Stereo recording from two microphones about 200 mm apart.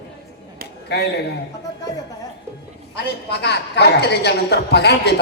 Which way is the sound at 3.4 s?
55° left (ahead or behind).